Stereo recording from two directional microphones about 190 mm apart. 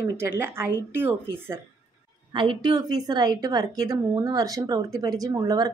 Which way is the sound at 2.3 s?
25° right (ahead or behind).